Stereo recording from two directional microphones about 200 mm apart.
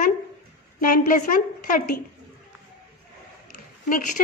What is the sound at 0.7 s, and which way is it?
A woman's voice, 45° left (ahead or behind).